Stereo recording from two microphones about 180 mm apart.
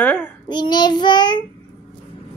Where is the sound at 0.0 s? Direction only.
10° left (ahead or behind).